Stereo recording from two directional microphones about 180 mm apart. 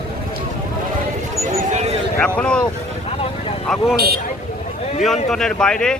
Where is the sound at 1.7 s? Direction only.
35° right (ahead or behind).